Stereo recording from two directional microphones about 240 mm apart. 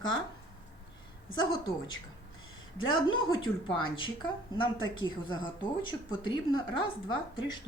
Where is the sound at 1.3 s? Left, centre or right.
Centre.